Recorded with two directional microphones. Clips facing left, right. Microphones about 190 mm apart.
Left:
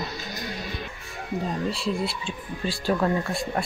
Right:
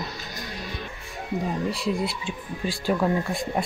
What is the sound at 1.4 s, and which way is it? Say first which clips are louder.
Speech: right 1 dB; 15° right (ahead or behind).